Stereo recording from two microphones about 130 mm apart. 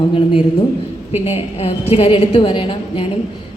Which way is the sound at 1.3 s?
50° left (ahead or behind).